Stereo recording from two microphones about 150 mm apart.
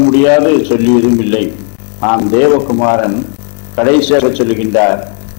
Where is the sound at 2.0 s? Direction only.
15° left (ahead or behind).